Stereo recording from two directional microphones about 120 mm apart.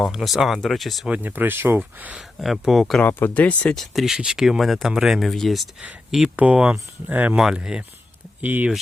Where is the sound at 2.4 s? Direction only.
Centre (ahead or behind).